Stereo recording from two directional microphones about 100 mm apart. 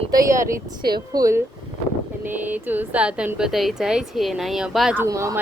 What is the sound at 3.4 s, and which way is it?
Speech, centre (ahead or behind).